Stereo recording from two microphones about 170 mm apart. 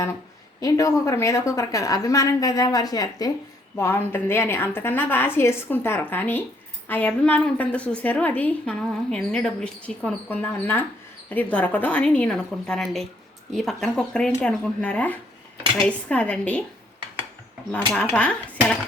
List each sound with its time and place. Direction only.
0.6 s a woman's voice: 20° left (ahead or behind)
17.9 s a woman's voice: 5° left (ahead or behind)